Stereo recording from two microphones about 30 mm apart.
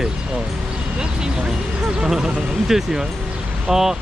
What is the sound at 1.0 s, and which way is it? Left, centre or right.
Speech, right.